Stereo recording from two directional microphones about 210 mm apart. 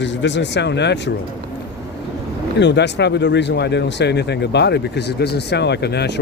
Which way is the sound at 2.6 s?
55° left (ahead or behind).